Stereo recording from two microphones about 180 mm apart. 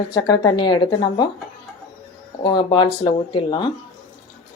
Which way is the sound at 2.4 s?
25° left (ahead or behind).